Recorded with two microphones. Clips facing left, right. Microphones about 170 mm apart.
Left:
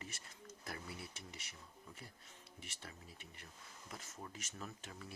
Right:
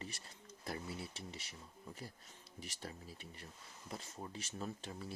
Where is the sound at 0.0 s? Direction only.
30° right (ahead or behind).